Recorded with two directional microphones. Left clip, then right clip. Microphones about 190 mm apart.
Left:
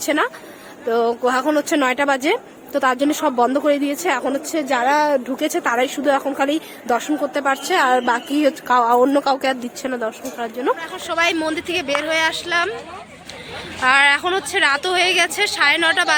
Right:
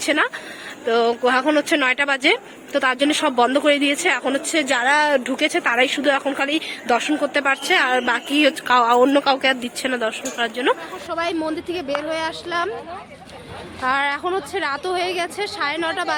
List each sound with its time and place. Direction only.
0.0 s a woman's voice: 20° left (ahead or behind)
1.1 s speech: centre (ahead or behind)
1.5 s speech: 20° left (ahead or behind); by 5.3 s centre (ahead or behind)
5.4 s speech: 20° left (ahead or behind)
7.6 s a woman's voice: 25° left (ahead or behind)
9.8 s speech: 10° left (ahead or behind)
13.8 s speech: 5° right (ahead or behind)